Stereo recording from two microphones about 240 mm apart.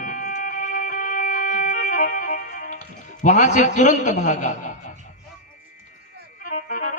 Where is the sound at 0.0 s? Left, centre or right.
Left.